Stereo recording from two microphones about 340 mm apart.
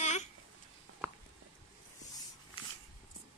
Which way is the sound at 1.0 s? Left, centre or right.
Centre.